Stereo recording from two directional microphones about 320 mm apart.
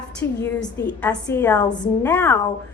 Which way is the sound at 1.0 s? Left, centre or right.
Centre.